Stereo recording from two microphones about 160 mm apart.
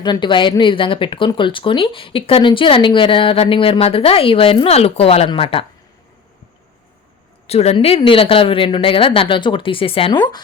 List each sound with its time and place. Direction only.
0.0 s speech: 30° left (ahead or behind)
7.4 s speech: 40° left (ahead or behind)